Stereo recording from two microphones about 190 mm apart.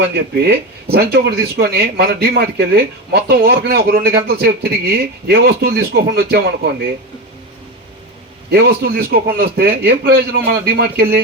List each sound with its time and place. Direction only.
0.0 s speech: 60° right (ahead or behind)
8.4 s speech: 60° right (ahead or behind)